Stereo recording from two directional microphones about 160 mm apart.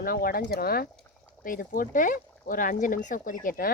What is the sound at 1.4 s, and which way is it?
Speech, 60° left (ahead or behind).